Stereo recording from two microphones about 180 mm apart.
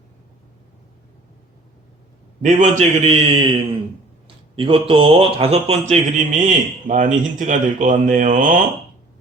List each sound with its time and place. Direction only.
2.4 s speech: 45° right (ahead or behind)
4.5 s speech: 30° right (ahead or behind); by 8.5 s 45° right (ahead or behind)